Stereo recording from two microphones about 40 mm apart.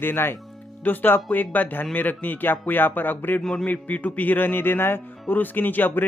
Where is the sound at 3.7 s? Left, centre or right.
Left.